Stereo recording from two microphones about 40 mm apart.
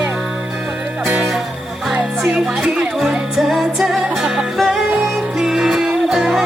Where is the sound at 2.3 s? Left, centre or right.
Right.